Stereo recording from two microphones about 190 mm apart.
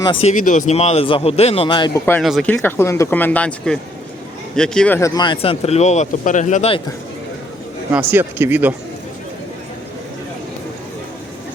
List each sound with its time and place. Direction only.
0.0 s a man's voice: 30° left (ahead or behind)
2.2 s speech: 5° left (ahead or behind); by 6.8 s 30° left (ahead or behind)
7.9 s speech: 10° right (ahead or behind)